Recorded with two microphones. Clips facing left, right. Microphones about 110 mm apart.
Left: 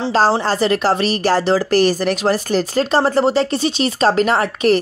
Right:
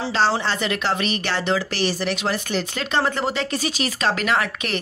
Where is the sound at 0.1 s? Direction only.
40° left (ahead or behind).